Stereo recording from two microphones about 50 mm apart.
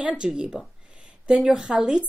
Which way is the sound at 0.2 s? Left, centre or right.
Centre.